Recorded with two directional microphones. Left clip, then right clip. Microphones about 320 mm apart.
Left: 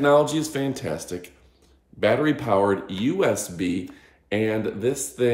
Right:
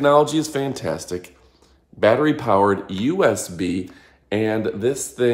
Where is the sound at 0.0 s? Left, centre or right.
Centre.